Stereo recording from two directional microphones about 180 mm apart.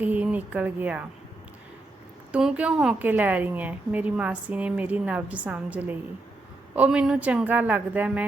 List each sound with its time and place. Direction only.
0.0 s speech: 10° right (ahead or behind)
2.3 s a woman's voice: 5° right (ahead or behind)